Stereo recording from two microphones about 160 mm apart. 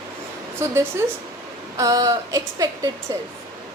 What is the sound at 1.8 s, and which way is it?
A woman's voice, 20° right (ahead or behind).